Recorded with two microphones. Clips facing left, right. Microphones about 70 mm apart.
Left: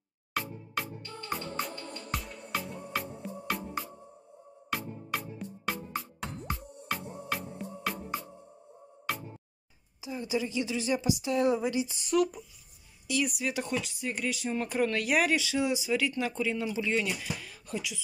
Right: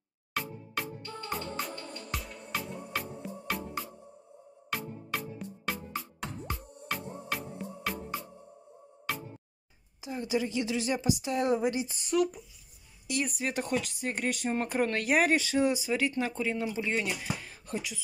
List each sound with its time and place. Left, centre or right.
0.3 s music: centre
4.6 s music: centre
9.1 s music: centre
10.0 s speech: right
10.6 s speech: right
12.1 s speech: centre
13.0 s a sound: right
13.4 s speech: right
14.6 s speech: right